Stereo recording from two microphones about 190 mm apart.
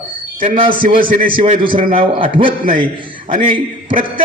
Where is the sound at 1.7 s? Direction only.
45° right (ahead or behind).